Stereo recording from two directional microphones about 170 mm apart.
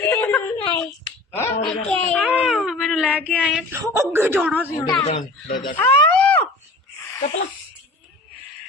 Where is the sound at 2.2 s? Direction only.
5° right (ahead or behind).